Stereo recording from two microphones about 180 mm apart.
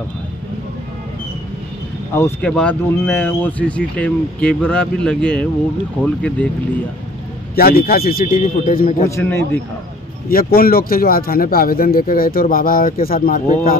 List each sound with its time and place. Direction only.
2.1 s speech: 15° left (ahead or behind)
7.5 s speech: 55° left (ahead or behind)
9.1 s speech: 10° left (ahead or behind)
10.3 s speech: 55° left (ahead or behind)